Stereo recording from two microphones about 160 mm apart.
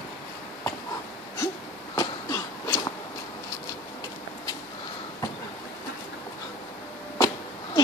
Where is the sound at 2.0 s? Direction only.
20° left (ahead or behind).